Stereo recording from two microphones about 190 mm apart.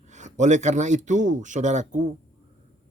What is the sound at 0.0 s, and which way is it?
Speech, 40° right (ahead or behind).